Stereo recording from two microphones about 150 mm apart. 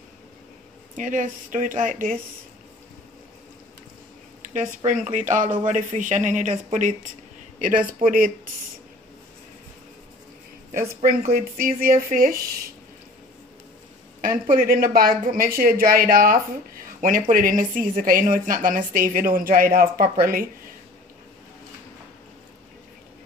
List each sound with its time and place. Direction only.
0.9 s speech: 60° right (ahead or behind)
4.6 s speech: 55° right (ahead or behind)
8.0 s a woman's voice: 65° right (ahead or behind)
11.3 s a woman's voice: 75° right (ahead or behind)
14.2 s a woman's voice: 70° right (ahead or behind)